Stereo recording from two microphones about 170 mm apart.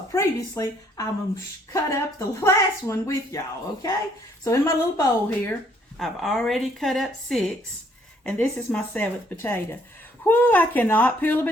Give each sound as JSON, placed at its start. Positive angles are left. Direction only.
{"t": 0.1, "sound": "speech", "side_deg": 20}
{"t": 4.4, "sound": "speech", "side_deg": 15}
{"t": 6.0, "sound": "speech", "side_deg": 0}